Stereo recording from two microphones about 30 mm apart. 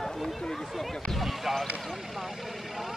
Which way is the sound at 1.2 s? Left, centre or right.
Centre.